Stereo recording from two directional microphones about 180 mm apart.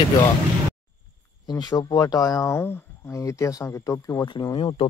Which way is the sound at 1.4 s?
25° left (ahead or behind).